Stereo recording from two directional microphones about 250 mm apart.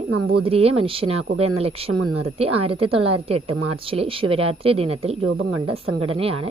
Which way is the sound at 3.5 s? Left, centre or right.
Right.